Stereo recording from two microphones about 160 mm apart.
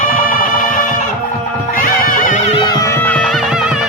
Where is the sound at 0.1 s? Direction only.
60° left (ahead or behind); by 2.6 s 40° left (ahead or behind).